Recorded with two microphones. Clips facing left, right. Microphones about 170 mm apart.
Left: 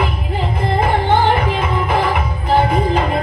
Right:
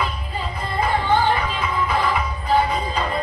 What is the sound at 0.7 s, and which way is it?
Music, 90° left.